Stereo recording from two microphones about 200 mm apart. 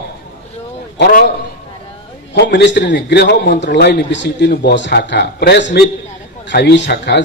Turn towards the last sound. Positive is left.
turn(degrees=60)  # may be behind; listen again after turning